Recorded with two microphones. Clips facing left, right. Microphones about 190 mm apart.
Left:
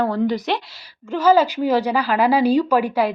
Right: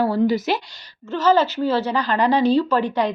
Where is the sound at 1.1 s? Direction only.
10° left (ahead or behind).